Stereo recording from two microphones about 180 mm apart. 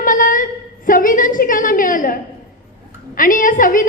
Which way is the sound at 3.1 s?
50° left (ahead or behind).